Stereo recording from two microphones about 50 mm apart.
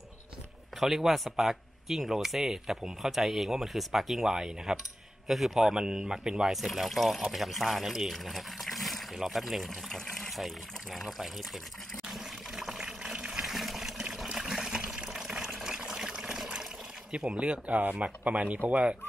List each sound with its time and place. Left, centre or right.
0.7 s speech: centre
5.8 s speech: centre
6.5 s speech: centre
12.1 s water: centre
17.2 s speech: centre